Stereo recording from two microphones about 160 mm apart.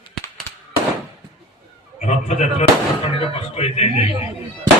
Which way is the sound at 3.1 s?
35° left (ahead or behind).